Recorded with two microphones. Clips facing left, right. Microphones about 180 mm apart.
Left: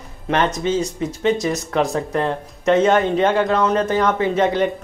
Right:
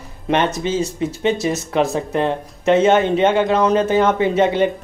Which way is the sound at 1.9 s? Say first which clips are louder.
Right 1 dB; 25° right (ahead or behind).